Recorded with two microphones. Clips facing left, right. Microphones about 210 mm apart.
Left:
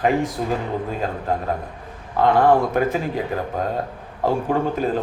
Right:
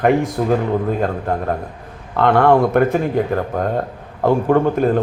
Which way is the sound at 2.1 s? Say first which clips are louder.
Right 3 dB; 65° right (ahead or behind).